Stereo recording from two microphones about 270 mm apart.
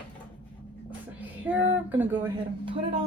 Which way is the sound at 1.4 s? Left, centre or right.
Centre.